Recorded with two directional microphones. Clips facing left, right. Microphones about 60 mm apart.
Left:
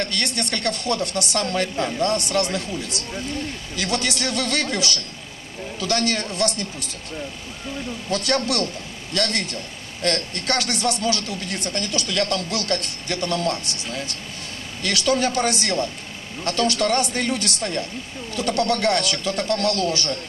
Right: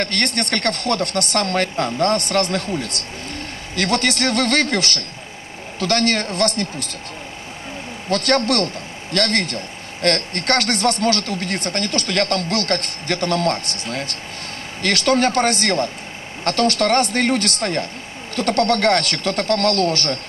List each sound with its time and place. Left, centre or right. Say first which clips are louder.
0.0 s speech: right 4 dB; right
8.1 s speech: right 5 dB; right